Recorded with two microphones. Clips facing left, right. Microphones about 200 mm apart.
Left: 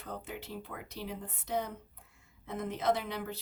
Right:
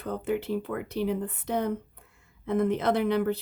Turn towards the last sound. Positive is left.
turn(degrees=-60)  # may be behind; listen again after turning